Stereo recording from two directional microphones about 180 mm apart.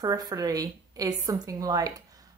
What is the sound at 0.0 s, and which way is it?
A woman's voice, 20° right (ahead or behind).